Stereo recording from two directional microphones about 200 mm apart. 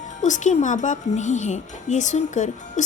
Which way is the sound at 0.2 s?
35° left (ahead or behind).